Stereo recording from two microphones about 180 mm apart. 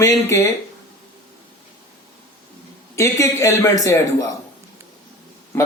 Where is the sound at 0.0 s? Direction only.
15° left (ahead or behind).